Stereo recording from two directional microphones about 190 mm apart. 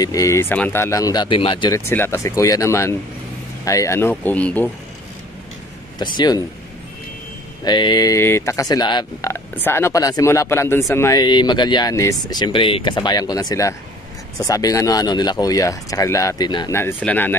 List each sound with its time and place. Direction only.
0.0 s speech: 20° left (ahead or behind)
1.7 s speech: 15° left (ahead or behind)
6.1 s speech: 20° left (ahead or behind)
7.6 s speech: 25° left (ahead or behind)